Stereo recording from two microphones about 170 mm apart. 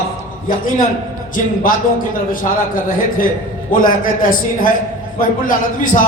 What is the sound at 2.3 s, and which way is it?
A man's voice, 55° left (ahead or behind).